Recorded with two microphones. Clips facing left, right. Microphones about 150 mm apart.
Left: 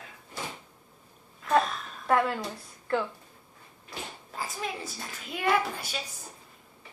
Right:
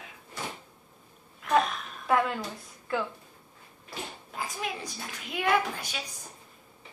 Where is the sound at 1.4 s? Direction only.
10° right (ahead or behind).